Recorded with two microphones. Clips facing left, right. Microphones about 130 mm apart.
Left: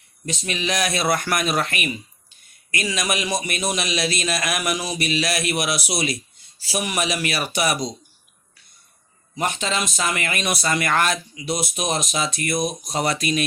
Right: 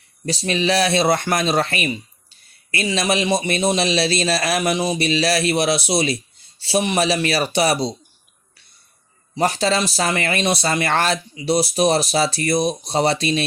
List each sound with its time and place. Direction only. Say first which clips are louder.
0.3 s speech: right 6 dB; 35° right (ahead or behind)
9.3 s speech: right 6 dB; 35° right (ahead or behind)